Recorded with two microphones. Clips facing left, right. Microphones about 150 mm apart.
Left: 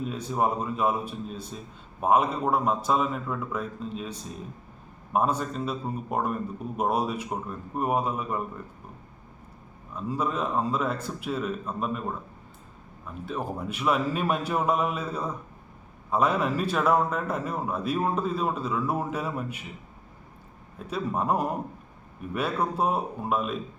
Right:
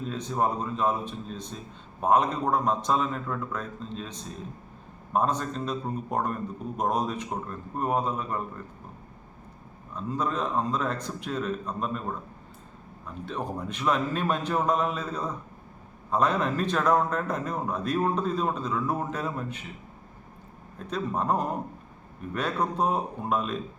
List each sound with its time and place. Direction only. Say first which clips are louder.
0.0 s a man's voice: left 1 dB; 10° left (ahead or behind)
9.9 s a man's voice: left 1 dB; 10° left (ahead or behind)
13.2 s a man's voice: left 1 dB; 5° left (ahead or behind)
20.7 s a man's voice: left 1 dB; 10° left (ahead or behind)